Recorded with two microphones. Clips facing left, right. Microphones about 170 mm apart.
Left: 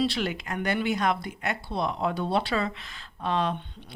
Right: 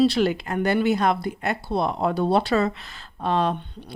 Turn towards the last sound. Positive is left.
turn(degrees=-40)  # may be behind; listen again after turning